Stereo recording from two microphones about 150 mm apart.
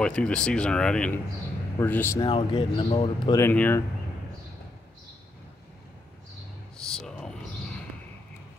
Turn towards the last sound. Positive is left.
turn(degrees=5)  # may be behind; listen again after turning